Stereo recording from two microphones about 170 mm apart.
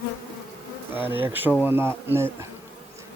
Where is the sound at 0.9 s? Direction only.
10° right (ahead or behind).